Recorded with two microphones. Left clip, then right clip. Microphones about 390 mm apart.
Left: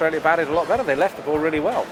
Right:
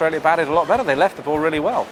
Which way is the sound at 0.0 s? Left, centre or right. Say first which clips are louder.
Right 2 dB; right.